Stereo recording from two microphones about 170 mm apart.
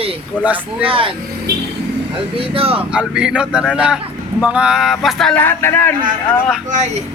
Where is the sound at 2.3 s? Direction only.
30° right (ahead or behind).